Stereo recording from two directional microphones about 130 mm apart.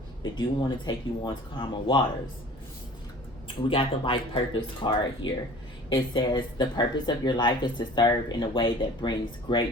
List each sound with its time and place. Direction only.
0.2 s speech: 35° left (ahead or behind)
3.7 s speech: 40° left (ahead or behind)